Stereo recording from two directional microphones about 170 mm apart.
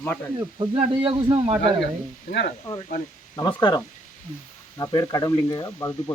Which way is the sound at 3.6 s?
25° left (ahead or behind).